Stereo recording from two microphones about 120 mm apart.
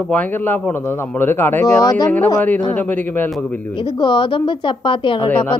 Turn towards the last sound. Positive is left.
turn(degrees=10)  # may be behind; listen again after turning